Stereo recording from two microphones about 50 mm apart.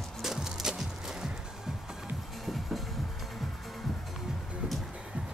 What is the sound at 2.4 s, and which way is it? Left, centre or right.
Music, centre.